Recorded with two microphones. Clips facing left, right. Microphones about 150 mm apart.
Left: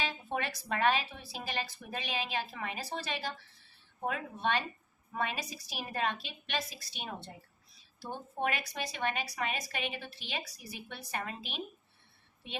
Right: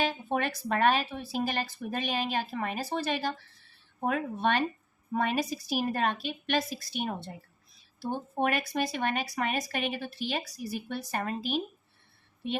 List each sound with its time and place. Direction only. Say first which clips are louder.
0.0 s speech: right 6 dB; 50° right (ahead or behind)